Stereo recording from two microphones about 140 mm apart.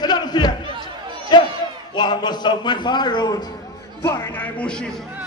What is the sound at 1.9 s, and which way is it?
A man's voice, 30° left (ahead or behind).